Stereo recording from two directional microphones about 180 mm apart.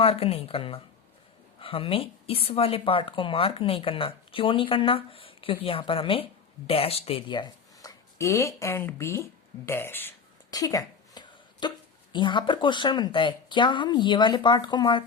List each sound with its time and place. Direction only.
0.0 s a woman's voice: 30° left (ahead or behind)